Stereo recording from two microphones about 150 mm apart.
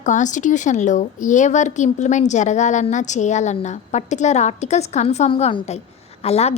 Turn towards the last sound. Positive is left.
turn(degrees=40)  # may be behind; listen again after turning